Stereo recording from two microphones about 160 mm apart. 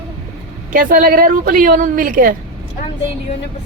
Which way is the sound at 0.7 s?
60° right (ahead or behind).